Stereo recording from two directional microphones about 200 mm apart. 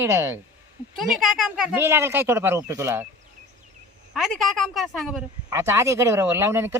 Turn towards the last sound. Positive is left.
turn(degrees=-15)  # may be behind; listen again after turning